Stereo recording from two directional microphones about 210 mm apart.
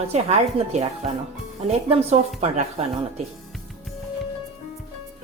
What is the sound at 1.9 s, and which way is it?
Speech, 30° right (ahead or behind).